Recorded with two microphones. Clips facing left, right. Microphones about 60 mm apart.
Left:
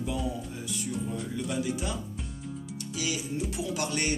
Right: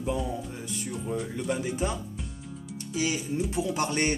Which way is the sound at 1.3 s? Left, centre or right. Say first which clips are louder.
Right 1 dB; right.